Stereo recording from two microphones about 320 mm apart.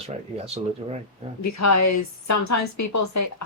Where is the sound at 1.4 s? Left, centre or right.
Left.